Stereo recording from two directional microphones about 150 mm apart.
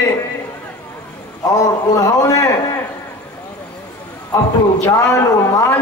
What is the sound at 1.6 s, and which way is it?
A man's voice, 25° left (ahead or behind).